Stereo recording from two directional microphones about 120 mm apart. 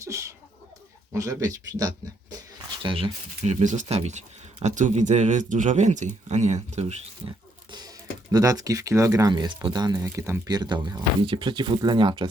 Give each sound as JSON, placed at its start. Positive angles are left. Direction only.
{"t": 0.0, "sound": "speech", "side_deg": -25}
{"t": 2.8, "sound": "speech", "side_deg": -50}
{"t": 3.4, "sound": "speech", "side_deg": -80}
{"t": 4.6, "sound": "speech", "side_deg": -90}
{"t": 7.3, "sound": "speech", "side_deg": -35}
{"t": 10.5, "sound": "speech", "side_deg": -35}